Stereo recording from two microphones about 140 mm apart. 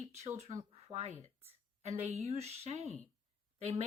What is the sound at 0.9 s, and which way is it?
Speech, 50° right (ahead or behind).